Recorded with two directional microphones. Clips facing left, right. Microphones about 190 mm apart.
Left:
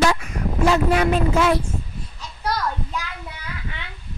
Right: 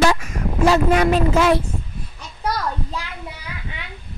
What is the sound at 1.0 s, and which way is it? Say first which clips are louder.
Speech: right 2 dB; 85° right.